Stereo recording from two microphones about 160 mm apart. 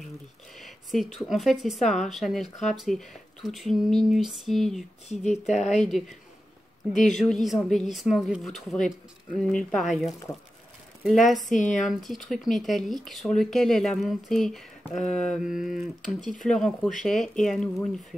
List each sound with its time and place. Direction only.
0.6 s speech: centre (ahead or behind)
5.0 s a woman's voice: 45° left (ahead or behind)
5.9 s speech: centre (ahead or behind)
6.9 s a woman's voice: 50° left (ahead or behind)
7.2 s speech: centre (ahead or behind)
11.1 s speech: centre (ahead or behind)
11.4 s a woman's voice: 50° left (ahead or behind)
11.9 s speech: centre (ahead or behind)